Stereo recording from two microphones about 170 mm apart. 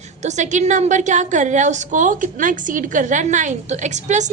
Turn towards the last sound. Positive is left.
turn(degrees=-45)  # may be behind; listen again after turning